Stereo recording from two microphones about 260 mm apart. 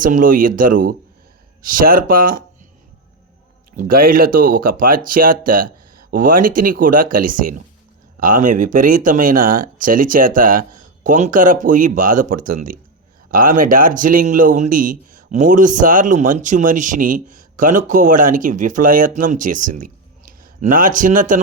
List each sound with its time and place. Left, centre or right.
0.0 s speech: right
3.8 s speech: right